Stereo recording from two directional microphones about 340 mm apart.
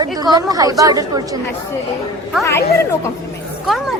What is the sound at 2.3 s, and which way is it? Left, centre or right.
Speech, centre.